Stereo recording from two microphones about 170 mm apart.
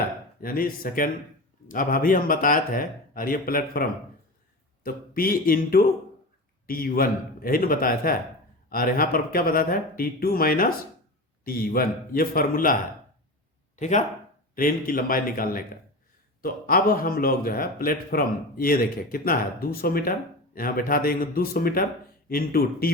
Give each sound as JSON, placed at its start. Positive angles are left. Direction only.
{"t": 0.4, "sound": "a man's voice", "side_deg": 55}
{"t": 14.5, "sound": "a man's voice", "side_deg": 55}